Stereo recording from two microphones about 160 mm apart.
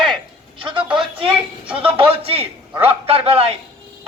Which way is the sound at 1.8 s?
35° right (ahead or behind).